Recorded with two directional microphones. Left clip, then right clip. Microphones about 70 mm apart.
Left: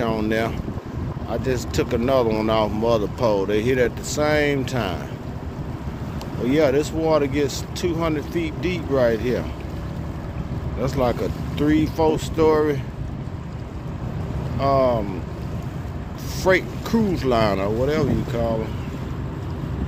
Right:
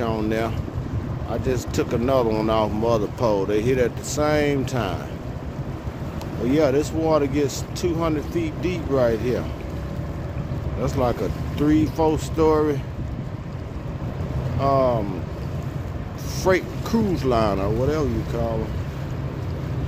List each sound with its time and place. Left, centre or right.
0.1 s speech: centre
1.4 s speech: centre
6.4 s speech: centre
10.8 s speech: centre
14.6 s speech: centre
16.4 s speech: centre